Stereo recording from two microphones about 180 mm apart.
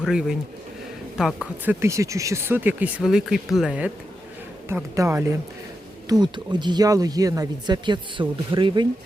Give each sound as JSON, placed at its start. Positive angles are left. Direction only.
{"t": 0.0, "sound": "speech", "side_deg": -5}